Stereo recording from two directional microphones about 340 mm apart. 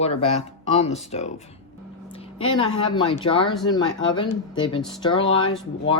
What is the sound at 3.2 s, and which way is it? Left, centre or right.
Speech, centre.